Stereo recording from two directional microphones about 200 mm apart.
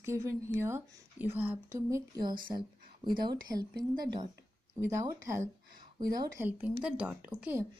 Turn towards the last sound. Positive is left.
turn(degrees=-10)  # may be behind; listen again after turning